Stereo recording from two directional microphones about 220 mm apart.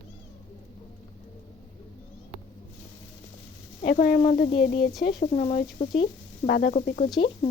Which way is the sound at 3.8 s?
40° left (ahead or behind).